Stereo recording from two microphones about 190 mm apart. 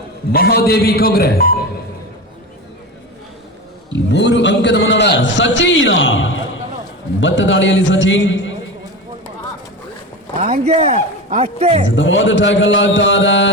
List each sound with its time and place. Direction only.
0.3 s a man's voice: 50° left (ahead or behind)
3.9 s a man's voice: 65° left (ahead or behind)
10.4 s a man's voice: 35° right (ahead or behind)
11.9 s a man's voice: 80° left